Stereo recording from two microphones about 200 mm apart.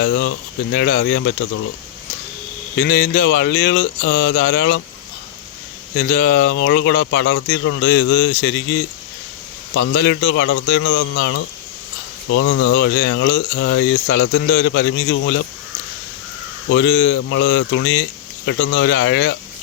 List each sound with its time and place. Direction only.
0.0 s speech: 70° left (ahead or behind)
2.8 s speech: 65° left (ahead or behind)
6.0 s speech: 50° left (ahead or behind)
6.5 s speech: 65° left (ahead or behind)
9.7 s speech: 65° left (ahead or behind); by 11.3 s 80° left
12.5 s speech: 80° left; by 15.4 s 65° left (ahead or behind)
16.6 s speech: 60° left (ahead or behind)